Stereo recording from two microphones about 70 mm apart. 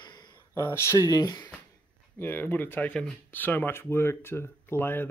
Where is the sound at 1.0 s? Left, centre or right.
Left.